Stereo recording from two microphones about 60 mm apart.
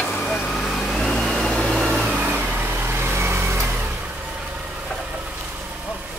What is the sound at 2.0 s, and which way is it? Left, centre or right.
Vehicle, right.